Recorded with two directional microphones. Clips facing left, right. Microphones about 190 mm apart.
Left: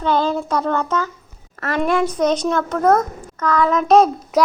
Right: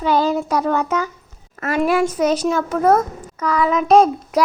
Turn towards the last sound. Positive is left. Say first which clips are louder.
# even
turn(degrees=0)  # may be behind; listen again after turning